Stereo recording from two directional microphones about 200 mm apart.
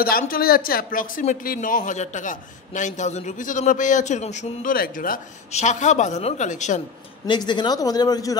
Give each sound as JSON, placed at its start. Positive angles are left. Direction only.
{"t": 0.2, "sound": "speech", "side_deg": 45}
{"t": 7.2, "sound": "speech", "side_deg": 20}